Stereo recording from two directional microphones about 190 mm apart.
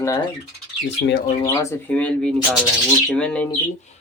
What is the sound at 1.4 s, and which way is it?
Speech, 15° left (ahead or behind).